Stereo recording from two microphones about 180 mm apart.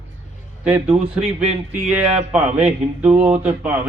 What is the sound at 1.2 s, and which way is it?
Speech, 35° right (ahead or behind).